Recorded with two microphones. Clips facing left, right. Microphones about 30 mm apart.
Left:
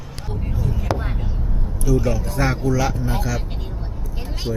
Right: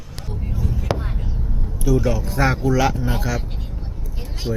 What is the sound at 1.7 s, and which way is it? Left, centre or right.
Speech, centre.